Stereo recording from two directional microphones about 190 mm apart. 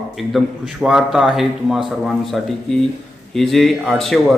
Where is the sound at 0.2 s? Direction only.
Centre (ahead or behind).